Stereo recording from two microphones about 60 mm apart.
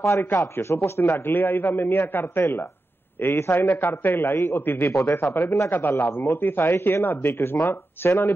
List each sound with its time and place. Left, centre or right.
0.2 s a man's voice: left
1.3 s a man's voice: left